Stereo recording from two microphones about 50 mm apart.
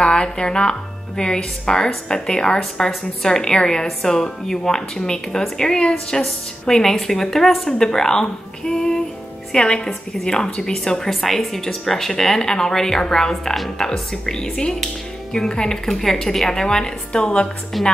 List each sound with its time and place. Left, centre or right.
0.0 s a woman's voice: centre
17.8 s a woman's voice: centre